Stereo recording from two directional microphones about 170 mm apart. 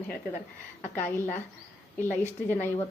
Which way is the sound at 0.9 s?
10° left (ahead or behind).